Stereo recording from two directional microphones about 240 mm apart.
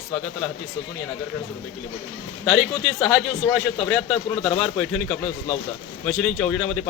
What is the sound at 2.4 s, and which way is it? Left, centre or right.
Speech, centre.